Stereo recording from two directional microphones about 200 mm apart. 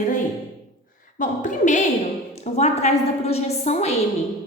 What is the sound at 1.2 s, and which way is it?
A woman's voice, 40° left (ahead or behind).